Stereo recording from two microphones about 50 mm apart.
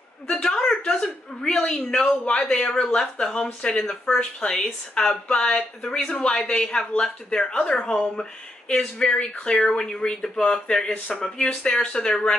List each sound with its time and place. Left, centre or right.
0.3 s speech: centre